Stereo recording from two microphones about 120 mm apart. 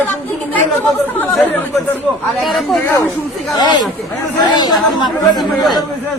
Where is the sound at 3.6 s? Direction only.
35° left (ahead or behind).